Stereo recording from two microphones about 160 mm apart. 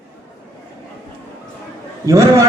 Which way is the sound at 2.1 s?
20° right (ahead or behind).